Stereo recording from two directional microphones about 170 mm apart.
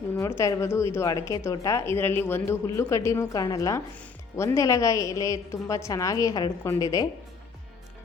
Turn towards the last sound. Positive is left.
turn(degrees=20)  # may be behind; listen again after turning